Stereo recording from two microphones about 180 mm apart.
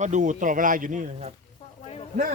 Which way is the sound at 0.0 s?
40° right (ahead or behind).